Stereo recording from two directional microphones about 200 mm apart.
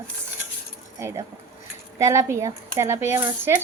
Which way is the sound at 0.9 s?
15° right (ahead or behind).